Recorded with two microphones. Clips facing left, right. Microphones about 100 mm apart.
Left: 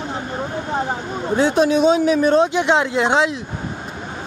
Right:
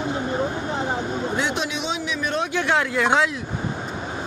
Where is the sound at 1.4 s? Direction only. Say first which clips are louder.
Left 10 dB; 35° left (ahead or behind).